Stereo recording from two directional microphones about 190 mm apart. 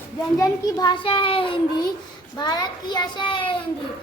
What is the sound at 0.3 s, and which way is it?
A child's voice, 20° left (ahead or behind).